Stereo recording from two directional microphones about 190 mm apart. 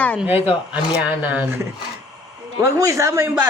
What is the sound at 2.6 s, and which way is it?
Speech, 15° right (ahead or behind).